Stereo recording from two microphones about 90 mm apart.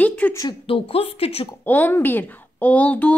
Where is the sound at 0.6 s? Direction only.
90° left.